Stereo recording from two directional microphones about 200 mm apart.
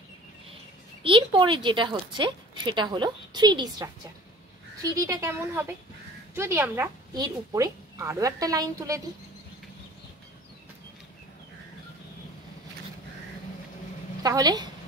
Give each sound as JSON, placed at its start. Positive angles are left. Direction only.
{"t": 1.0, "sound": "speech", "side_deg": -25}
{"t": 4.9, "sound": "a woman's voice", "side_deg": -15}
{"t": 14.2, "sound": "speech", "side_deg": -20}